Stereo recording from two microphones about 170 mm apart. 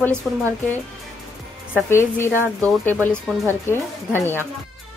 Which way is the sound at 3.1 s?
5° right (ahead or behind).